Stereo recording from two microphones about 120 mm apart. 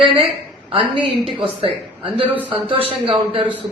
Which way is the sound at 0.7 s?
45° right (ahead or behind).